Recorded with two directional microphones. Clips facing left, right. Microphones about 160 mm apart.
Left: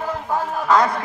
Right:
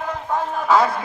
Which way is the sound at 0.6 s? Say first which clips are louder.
Even; 5° right (ahead or behind).